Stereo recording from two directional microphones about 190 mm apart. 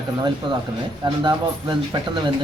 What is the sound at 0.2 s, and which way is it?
Speech, 25° right (ahead or behind).